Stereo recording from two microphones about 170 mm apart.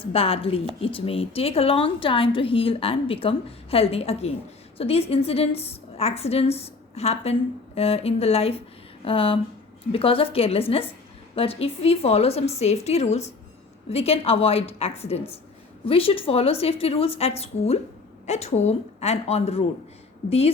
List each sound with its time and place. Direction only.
0.1 s a woman's voice: 35° left (ahead or behind)